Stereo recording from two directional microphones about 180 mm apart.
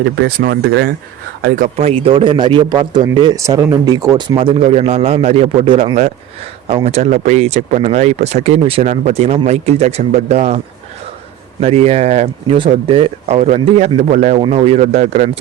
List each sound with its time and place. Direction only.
0.3 s speech: 60° right (ahead or behind); by 0.9 s 75° right (ahead or behind)
1.4 s speech: 50° right (ahead or behind)
1.9 s speech: 30° right (ahead or behind)
11.6 s speech: 40° right (ahead or behind)